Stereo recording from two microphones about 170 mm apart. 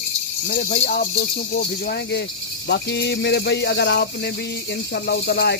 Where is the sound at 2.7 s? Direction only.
90° left.